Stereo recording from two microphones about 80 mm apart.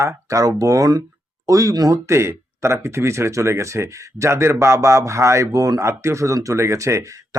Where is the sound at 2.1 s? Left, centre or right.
Right.